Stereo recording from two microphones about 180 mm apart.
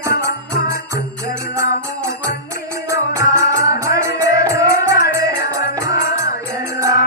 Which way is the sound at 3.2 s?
15° right (ahead or behind).